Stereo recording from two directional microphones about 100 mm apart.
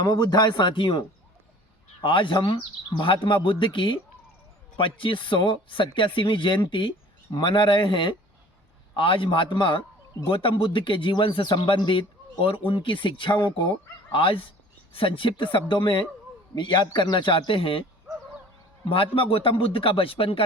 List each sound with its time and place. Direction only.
0.0 s speech: 45° left (ahead or behind); by 17.8 s 60° left (ahead or behind)
18.9 s speech: 65° left (ahead or behind)